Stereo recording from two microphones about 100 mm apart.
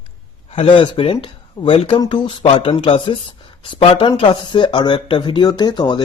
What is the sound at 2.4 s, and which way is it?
Speech, 65° left (ahead or behind).